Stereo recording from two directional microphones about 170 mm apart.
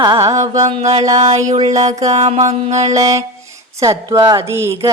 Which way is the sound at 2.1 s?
40° right (ahead or behind).